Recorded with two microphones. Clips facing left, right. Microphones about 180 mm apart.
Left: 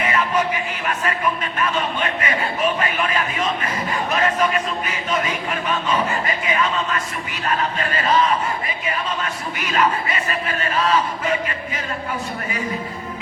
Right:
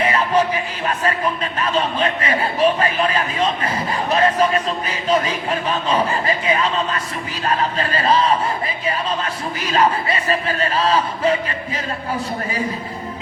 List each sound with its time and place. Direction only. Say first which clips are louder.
0.0 s speech: right 3 dB; 30° right (ahead or behind)